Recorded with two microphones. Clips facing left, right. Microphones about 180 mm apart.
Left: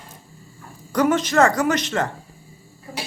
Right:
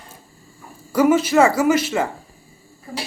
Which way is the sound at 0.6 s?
5° right (ahead or behind).